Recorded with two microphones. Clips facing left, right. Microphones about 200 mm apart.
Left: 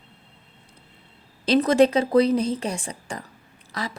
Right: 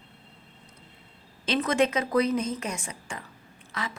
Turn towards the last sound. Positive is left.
turn(degrees=35)  # may be behind; listen again after turning